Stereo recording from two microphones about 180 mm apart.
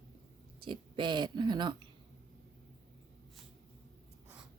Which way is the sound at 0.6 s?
25° right (ahead or behind).